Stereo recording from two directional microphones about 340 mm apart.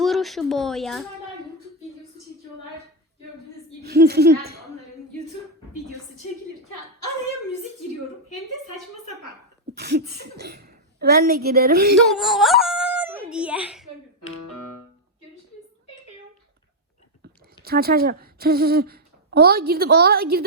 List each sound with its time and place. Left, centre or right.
0.0 s speech: centre
3.8 s a woman's voice: right
9.7 s a woman's voice: right
12.1 s speech: centre
14.3 s music: left
17.2 s speech: right